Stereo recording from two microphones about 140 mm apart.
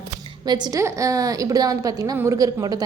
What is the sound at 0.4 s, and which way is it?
A woman's voice, 30° right (ahead or behind).